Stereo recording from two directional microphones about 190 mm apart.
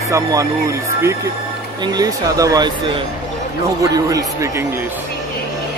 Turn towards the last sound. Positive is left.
turn(degrees=-15)  # may be behind; listen again after turning